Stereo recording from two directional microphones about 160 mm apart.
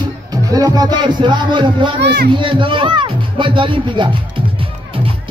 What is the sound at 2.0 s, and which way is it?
Speech, 90° right.